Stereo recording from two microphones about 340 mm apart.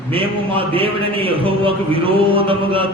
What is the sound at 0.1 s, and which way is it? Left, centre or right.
A man's voice, centre.